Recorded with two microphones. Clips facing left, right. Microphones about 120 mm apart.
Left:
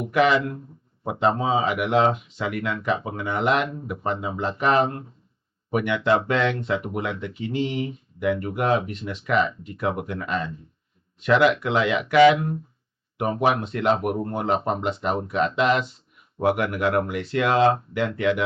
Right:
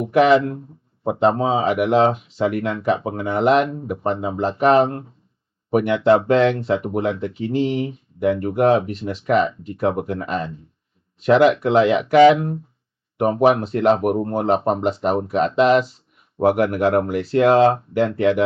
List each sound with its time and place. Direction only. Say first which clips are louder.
0.1 s speech: right 6 dB; 40° right (ahead or behind)